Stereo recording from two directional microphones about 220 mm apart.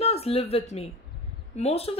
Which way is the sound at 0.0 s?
25° left (ahead or behind).